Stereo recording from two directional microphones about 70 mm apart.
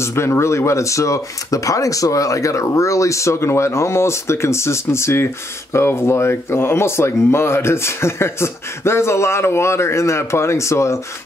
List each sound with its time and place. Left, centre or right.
0.0 s speech: left